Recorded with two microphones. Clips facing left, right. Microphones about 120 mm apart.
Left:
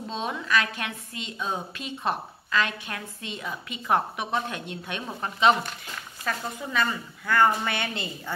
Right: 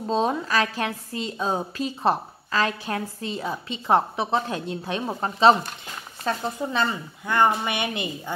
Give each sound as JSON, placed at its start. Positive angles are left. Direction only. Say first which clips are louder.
{"t": 0.1, "sound": "a woman's voice", "louder": "right 5 dB", "side_deg": -40}